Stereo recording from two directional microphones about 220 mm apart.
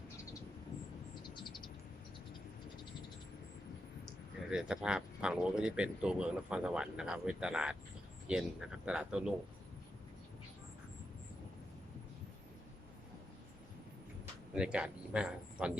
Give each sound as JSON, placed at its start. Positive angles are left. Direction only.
{"t": 1.2, "sound": "a sound", "side_deg": 20}
{"t": 4.4, "sound": "speech", "side_deg": -5}
{"t": 14.5, "sound": "speech", "side_deg": -5}